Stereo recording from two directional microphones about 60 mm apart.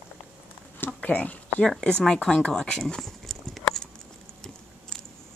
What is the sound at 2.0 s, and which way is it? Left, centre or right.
Speech, centre.